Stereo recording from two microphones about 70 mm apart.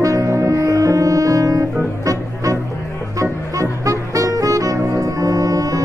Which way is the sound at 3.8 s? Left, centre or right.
Right.